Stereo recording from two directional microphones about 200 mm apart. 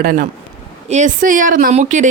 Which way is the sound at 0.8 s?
35° right (ahead or behind).